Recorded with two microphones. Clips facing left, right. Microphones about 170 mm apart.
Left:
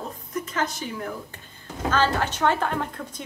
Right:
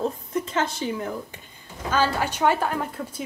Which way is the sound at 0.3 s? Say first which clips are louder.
Right 3 dB; 25° right (ahead or behind).